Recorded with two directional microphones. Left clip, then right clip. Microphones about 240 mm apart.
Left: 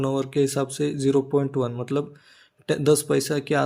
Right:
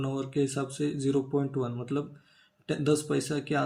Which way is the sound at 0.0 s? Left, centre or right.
Left.